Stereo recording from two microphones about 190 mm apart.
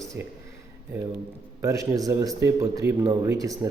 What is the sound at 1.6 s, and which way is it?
Speech, 15° right (ahead or behind).